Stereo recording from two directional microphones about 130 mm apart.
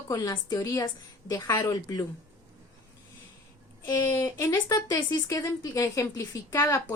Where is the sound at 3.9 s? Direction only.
20° left (ahead or behind).